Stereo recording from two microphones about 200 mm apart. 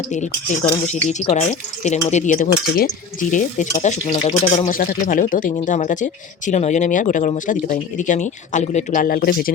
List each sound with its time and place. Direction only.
0.1 s speech: 35° left (ahead or behind)
4.7 s speech: 45° left (ahead or behind)